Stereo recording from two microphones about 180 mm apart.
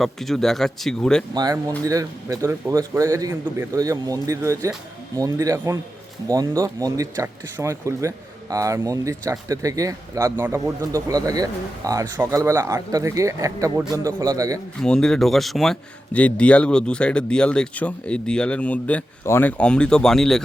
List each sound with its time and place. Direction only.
0.0 s speech: centre (ahead or behind)
1.3 s speech: 20° right (ahead or behind)
14.8 s speech: 5° left (ahead or behind)